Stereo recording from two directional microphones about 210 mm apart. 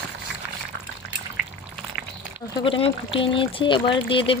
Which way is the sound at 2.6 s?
25° left (ahead or behind).